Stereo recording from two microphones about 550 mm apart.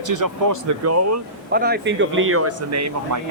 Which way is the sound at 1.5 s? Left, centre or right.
Centre.